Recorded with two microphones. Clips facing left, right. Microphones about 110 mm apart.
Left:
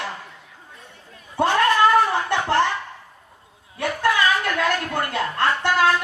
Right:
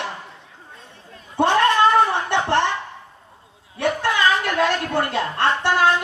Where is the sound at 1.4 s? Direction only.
25° right (ahead or behind).